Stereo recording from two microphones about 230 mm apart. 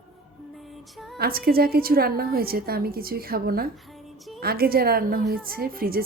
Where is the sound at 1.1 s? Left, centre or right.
Right.